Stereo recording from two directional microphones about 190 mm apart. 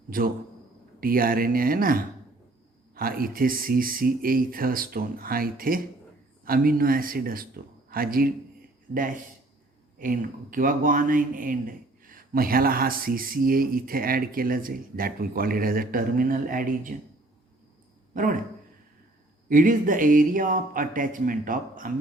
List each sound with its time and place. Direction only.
0.1 s speech: 50° right (ahead or behind)
10.0 s speech: 45° right (ahead or behind)
18.1 s a man's voice: 45° right (ahead or behind)
19.5 s speech: 45° right (ahead or behind)